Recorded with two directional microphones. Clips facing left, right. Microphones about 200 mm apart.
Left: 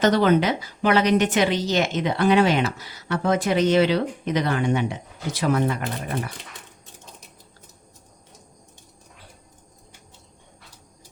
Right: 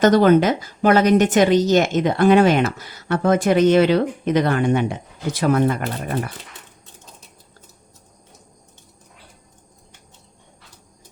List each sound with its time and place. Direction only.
0.0 s a woman's voice: 45° right (ahead or behind)